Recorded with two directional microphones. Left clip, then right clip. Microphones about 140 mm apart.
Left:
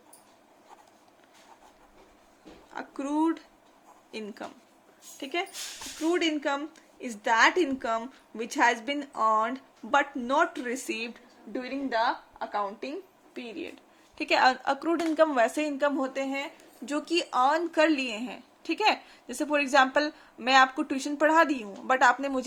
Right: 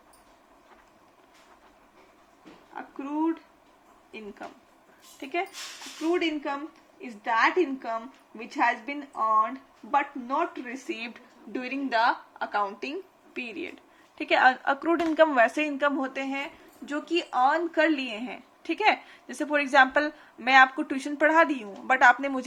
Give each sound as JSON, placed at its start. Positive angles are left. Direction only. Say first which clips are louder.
{"t": 5.2, "sound": "speech", "louder": "right 1 dB", "side_deg": 45}
{"t": 6.1, "sound": "speech", "louder": "even", "side_deg": 65}
{"t": 7.0, "sound": "a woman's voice", "louder": "left 2 dB", "side_deg": 90}
{"t": 11.9, "sound": "a woman's voice", "louder": "right 3 dB", "side_deg": 10}
{"t": 14.2, "sound": "a woman's voice", "louder": "right 2 dB", "side_deg": 35}
{"t": 16.8, "sound": "speech", "louder": "even", "side_deg": 55}